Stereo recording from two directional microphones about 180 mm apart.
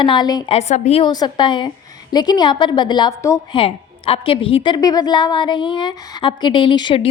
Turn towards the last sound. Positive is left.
turn(degrees=25)  # may be behind; listen again after turning